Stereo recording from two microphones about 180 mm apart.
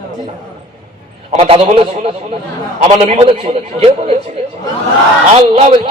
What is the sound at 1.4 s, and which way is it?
A man's voice, 30° right (ahead or behind).